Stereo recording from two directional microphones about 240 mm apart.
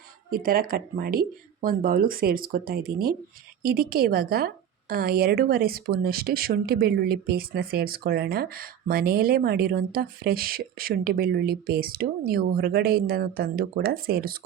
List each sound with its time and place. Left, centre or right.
0.3 s speech: right